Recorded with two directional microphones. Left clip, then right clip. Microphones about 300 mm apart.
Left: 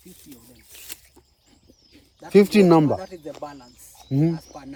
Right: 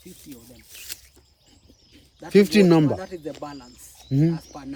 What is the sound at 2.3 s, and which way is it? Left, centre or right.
Speech, centre.